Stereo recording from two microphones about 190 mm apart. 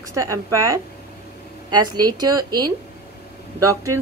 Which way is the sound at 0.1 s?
15° right (ahead or behind).